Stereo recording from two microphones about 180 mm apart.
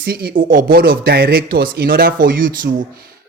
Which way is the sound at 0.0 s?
60° right (ahead or behind).